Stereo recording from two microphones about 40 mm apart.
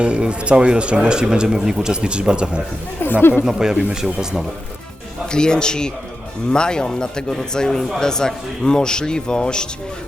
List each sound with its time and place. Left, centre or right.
0.0 s speech: right
3.0 s speech: left
3.4 s a man's voice: centre
5.3 s a man's voice: left